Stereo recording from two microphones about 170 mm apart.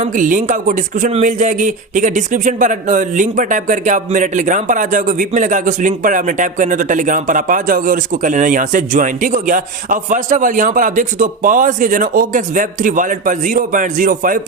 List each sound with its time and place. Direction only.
0.0 s speech: 50° right (ahead or behind)